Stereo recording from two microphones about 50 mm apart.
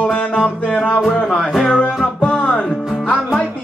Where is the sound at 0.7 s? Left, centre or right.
Centre.